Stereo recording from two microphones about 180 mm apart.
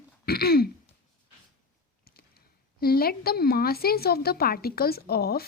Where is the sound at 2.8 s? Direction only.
55° left (ahead or behind).